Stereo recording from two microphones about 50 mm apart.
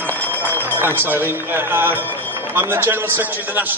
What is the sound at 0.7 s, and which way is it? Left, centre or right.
A man's voice, right.